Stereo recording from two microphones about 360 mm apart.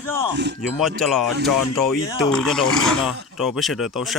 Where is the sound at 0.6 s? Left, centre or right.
Centre.